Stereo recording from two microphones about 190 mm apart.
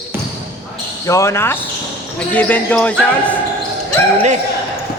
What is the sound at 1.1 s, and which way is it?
A man's voice, 15° left (ahead or behind).